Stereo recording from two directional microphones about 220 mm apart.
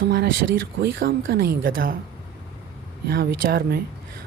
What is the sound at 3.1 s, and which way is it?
Speech, 45° right (ahead or behind).